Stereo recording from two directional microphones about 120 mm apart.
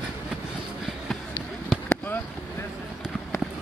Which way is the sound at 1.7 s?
10° left (ahead or behind).